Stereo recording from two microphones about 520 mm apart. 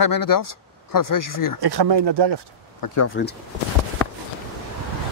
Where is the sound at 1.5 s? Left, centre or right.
Right.